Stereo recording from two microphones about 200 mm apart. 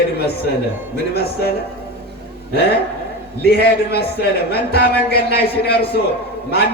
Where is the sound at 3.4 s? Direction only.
55° left (ahead or behind).